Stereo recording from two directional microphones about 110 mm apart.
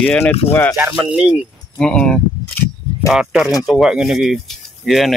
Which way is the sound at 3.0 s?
5° right (ahead or behind).